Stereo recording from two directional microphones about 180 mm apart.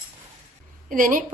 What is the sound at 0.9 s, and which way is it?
Speech, 45° right (ahead or behind).